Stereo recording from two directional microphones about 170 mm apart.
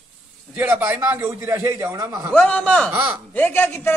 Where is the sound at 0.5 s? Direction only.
10° right (ahead or behind).